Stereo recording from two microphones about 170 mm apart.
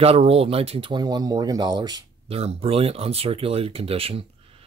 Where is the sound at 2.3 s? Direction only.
35° right (ahead or behind).